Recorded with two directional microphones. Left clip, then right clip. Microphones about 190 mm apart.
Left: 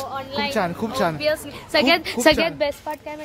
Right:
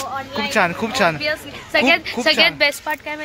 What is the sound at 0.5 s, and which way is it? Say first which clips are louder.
Speech: right 9 dB; 5° right (ahead or behind).